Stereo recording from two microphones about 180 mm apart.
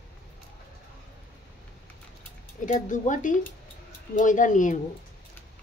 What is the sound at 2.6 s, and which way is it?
Speech, 45° left (ahead or behind).